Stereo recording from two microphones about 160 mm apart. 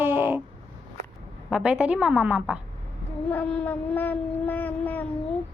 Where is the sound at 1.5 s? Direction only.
5° right (ahead or behind).